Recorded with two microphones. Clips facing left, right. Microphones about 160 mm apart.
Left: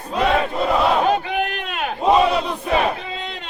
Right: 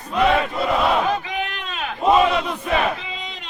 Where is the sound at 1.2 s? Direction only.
60° left (ahead or behind).